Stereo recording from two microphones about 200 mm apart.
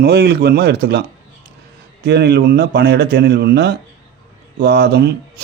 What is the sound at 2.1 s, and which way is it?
Speech, 55° right (ahead or behind).